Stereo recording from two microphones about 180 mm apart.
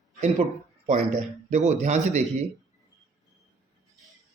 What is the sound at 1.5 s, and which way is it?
Speech, 40° right (ahead or behind).